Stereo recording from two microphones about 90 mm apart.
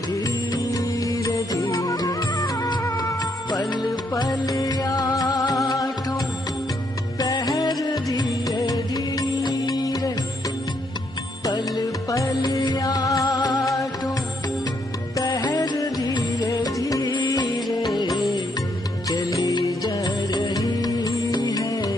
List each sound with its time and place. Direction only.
0.2 s music: 40° left (ahead or behind)
7.2 s music: 45° left (ahead or behind)
11.4 s music: 45° left (ahead or behind)
15.1 s music: 40° left (ahead or behind)
19.0 s music: 40° left (ahead or behind)